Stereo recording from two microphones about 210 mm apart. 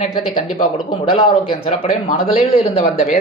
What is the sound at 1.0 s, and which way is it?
A man's voice, 25° left (ahead or behind).